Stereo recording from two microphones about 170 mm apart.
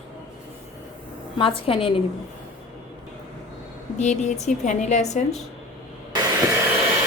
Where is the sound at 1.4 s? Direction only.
30° left (ahead or behind).